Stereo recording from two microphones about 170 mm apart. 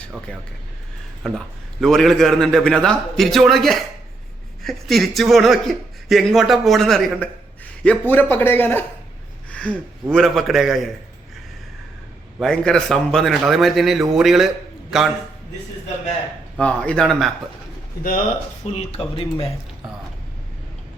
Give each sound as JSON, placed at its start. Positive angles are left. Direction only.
{"t": 1.2, "sound": "a man's voice", "side_deg": 5}
{"t": 12.4, "sound": "a man's voice", "side_deg": 5}
{"t": 16.6, "sound": "a man's voice", "side_deg": 5}
{"t": 18.6, "sound": "speech", "side_deg": 40}